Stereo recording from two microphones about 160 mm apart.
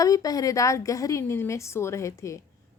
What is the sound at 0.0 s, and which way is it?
A woman's voice, 20° left (ahead or behind).